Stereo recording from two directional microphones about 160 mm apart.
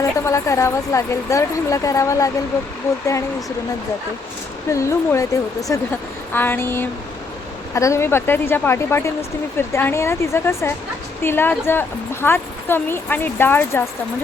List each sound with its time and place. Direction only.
0.3 s speech: 20° left (ahead or behind)
4.7 s a woman's voice: 20° left (ahead or behind)